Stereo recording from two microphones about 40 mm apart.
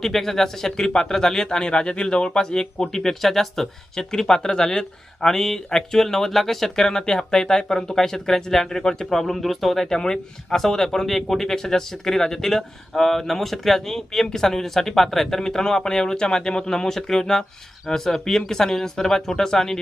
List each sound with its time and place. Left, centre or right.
0.0 s speech: centre
9.9 s speech: centre